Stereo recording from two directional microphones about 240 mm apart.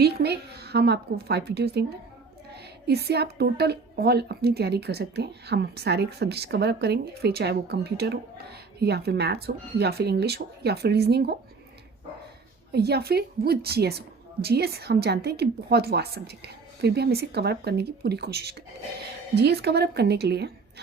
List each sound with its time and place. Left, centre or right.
0.0 s a woman's voice: right
2.8 s a woman's voice: right
12.7 s a woman's voice: right